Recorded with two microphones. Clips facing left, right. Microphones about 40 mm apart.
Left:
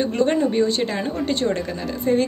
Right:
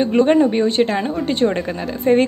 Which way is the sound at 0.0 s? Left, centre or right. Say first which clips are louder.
Right 6 dB; centre.